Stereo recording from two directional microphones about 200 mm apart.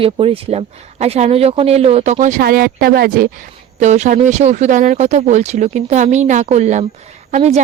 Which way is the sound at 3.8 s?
35° right (ahead or behind).